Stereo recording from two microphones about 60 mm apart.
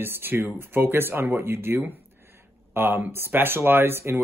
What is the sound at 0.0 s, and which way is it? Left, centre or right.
Speech, right.